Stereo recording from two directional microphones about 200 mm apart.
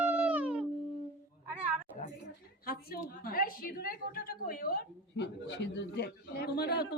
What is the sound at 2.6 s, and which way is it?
A woman's voice, 50° left (ahead or behind).